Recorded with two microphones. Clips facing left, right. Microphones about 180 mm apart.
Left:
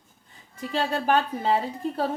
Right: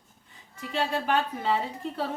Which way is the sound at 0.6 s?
40° left (ahead or behind).